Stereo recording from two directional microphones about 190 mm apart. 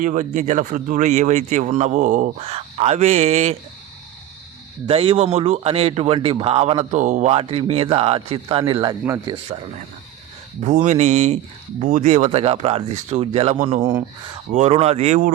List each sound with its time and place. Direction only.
0.0 s speech: 45° right (ahead or behind)
4.9 s speech: 30° right (ahead or behind)
10.6 s speech: 40° right (ahead or behind)